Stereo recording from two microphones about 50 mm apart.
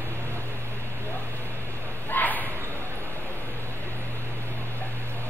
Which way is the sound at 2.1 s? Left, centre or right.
Left.